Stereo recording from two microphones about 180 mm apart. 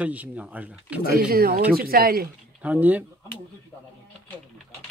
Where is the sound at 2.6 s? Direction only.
10° right (ahead or behind).